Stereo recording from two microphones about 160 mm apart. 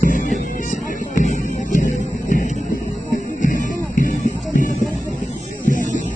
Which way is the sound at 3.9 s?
60° left (ahead or behind).